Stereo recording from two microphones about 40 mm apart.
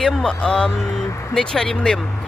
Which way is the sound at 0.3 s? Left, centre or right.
Centre.